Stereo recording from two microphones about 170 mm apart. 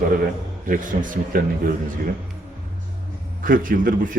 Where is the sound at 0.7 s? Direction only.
50° right (ahead or behind).